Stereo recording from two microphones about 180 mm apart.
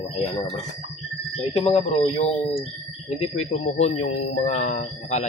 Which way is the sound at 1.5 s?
35° left (ahead or behind).